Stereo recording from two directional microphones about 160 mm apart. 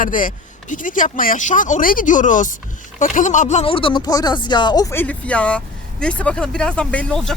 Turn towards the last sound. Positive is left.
turn(degrees=5)  # may be behind; listen again after turning